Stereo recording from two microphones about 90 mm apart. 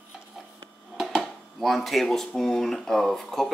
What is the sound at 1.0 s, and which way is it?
Speech, centre (ahead or behind).